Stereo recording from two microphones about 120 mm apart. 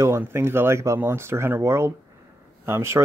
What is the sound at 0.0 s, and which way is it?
Speech, 20° right (ahead or behind).